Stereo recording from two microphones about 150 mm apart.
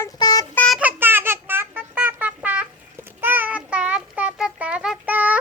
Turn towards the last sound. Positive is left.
turn(degrees=-10)  # may be behind; listen again after turning